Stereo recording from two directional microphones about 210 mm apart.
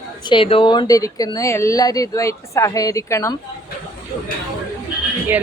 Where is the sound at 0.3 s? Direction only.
25° left (ahead or behind).